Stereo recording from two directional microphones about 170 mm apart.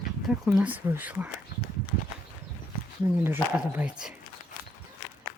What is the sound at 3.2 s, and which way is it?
Speech, 10° right (ahead or behind).